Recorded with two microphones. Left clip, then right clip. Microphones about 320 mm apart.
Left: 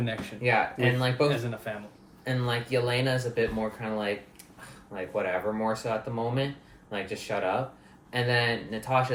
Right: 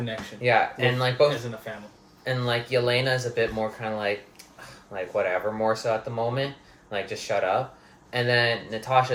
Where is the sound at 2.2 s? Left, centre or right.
Centre.